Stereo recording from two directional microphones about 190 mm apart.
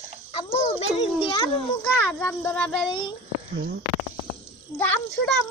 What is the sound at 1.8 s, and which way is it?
Speech, 10° left (ahead or behind).